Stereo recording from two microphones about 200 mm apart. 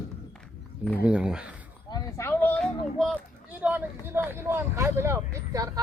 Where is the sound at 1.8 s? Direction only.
15° left (ahead or behind); by 3.9 s 5° right (ahead or behind).